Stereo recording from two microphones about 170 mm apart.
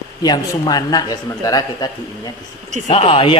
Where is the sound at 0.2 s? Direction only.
20° left (ahead or behind).